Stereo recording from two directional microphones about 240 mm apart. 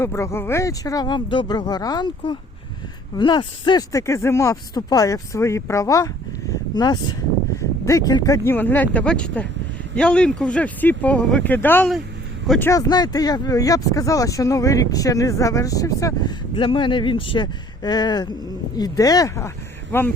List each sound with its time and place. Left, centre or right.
0.0 s speech: centre
6.5 s a sound: centre
7.9 s speech: centre